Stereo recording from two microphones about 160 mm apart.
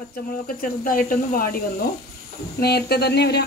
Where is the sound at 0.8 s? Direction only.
60° left (ahead or behind).